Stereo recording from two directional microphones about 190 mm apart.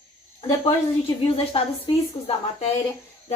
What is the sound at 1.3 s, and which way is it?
Speech, 30° left (ahead or behind).